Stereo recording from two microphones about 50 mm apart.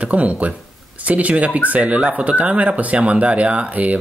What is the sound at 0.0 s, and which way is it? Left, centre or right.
Speech, right.